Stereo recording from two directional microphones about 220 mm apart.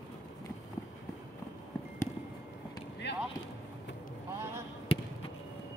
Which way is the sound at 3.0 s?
50° left (ahead or behind).